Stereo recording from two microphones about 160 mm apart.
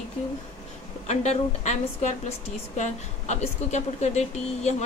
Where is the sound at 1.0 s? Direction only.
45° left (ahead or behind).